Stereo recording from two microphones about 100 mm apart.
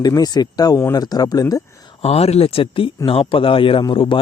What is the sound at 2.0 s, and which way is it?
Speech, 85° left.